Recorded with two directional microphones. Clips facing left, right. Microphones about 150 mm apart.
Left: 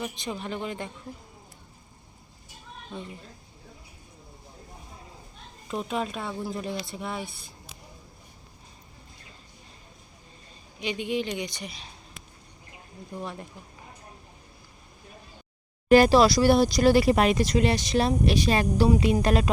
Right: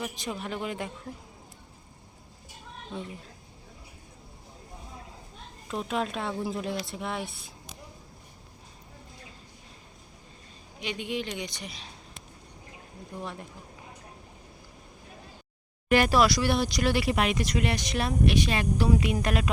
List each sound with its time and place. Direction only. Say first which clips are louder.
0.0 s speech: left 1 dB; 5° right (ahead or behind)
5.6 s speech: left 1 dB; centre (ahead or behind)
10.8 s speech: left 4 dB; centre (ahead or behind)
15.9 s speech: left 5 dB; 30° left (ahead or behind)